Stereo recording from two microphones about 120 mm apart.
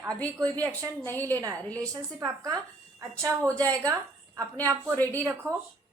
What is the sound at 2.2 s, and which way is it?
A woman's voice, 35° right (ahead or behind).